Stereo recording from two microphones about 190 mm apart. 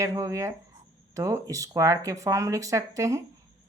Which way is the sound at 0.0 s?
15° right (ahead or behind).